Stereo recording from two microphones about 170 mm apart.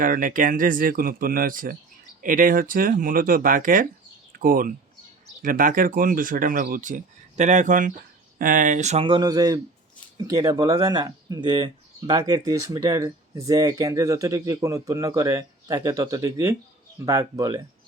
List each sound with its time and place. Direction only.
0.0 s speech: 55° right (ahead or behind)
9.0 s speech: 25° right (ahead or behind)